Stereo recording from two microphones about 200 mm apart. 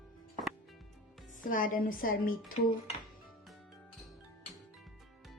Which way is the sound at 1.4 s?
40° left (ahead or behind).